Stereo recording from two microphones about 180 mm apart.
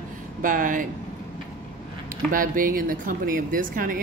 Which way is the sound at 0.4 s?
50° right (ahead or behind).